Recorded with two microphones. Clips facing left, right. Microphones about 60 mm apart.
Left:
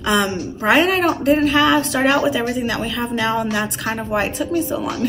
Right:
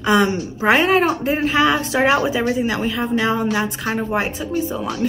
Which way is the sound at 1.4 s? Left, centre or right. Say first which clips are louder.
Left 2 dB; centre.